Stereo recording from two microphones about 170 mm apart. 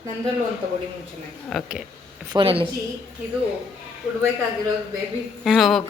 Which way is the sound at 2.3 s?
30° right (ahead or behind).